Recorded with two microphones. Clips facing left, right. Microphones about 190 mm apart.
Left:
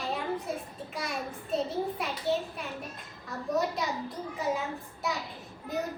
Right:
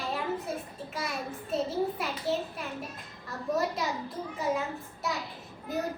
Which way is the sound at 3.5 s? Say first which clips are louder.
Left 1 dB; centre (ahead or behind).